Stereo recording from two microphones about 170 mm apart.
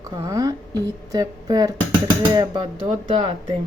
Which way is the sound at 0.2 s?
20° right (ahead or behind).